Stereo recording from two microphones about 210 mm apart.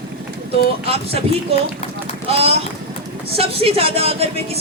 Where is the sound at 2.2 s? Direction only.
30° right (ahead or behind).